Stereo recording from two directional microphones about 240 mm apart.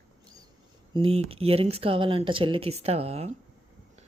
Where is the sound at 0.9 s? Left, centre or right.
Right.